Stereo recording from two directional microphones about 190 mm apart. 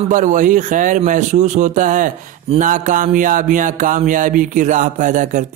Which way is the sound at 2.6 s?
45° right (ahead or behind).